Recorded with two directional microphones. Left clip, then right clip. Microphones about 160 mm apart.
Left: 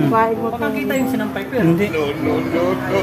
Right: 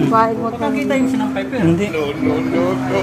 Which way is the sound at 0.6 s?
30° left (ahead or behind).